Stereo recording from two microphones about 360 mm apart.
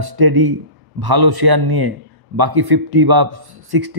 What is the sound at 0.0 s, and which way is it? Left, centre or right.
A man's voice, right.